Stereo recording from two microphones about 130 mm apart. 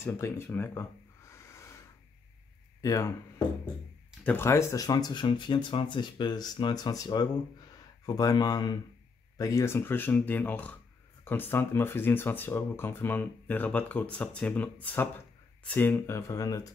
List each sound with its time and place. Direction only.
0.0 s speech: 20° left (ahead or behind)
1.3 s wheeze: 20° left (ahead or behind)
2.8 s speech: 25° left (ahead or behind)
4.2 s speech: 15° left (ahead or behind)